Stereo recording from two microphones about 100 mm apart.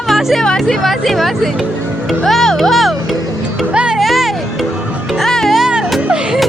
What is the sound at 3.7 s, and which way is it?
Music, 10° right (ahead or behind).